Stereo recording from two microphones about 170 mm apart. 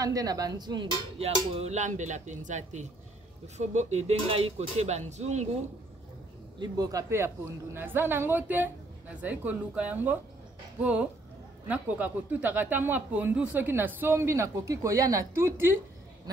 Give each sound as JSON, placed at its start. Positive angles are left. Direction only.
{"t": 0.0, "sound": "speech", "side_deg": -20}
{"t": 1.2, "sound": "speech", "side_deg": -40}
{"t": 6.6, "sound": "speech", "side_deg": -20}